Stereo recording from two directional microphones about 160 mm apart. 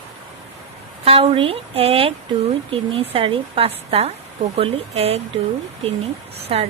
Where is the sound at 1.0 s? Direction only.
35° right (ahead or behind).